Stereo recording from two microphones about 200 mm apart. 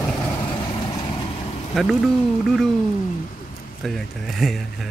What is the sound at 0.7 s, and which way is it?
Vehicle, 25° left (ahead or behind).